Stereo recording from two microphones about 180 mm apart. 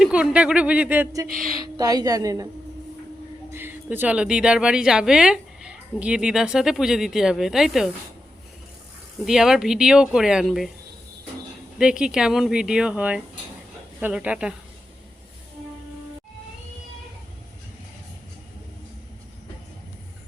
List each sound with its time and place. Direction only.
0.0 s a woman's voice: 5° right (ahead or behind)
3.5 s a woman's voice: 10° right (ahead or behind)
9.2 s a woman's voice: 5° right (ahead or behind)
11.8 s a woman's voice: 5° right (ahead or behind)